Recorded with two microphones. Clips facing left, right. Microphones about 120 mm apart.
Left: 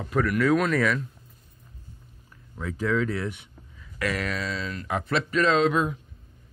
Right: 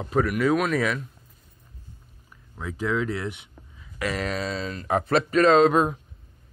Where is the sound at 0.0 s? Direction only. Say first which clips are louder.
Right 2 dB; 25° right (ahead or behind).